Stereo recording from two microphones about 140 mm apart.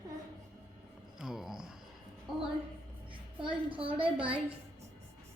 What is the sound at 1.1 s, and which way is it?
Speech, centre (ahead or behind).